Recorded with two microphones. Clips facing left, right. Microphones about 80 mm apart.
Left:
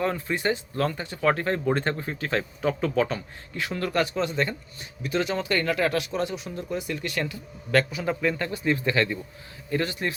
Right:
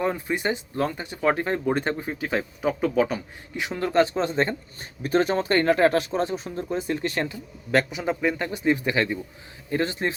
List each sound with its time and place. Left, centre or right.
0.0 s speech: centre